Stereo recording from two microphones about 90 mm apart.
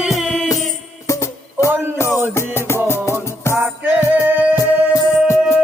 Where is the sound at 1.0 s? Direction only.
35° left (ahead or behind).